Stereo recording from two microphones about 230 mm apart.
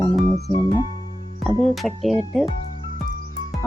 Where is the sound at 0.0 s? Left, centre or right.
Centre.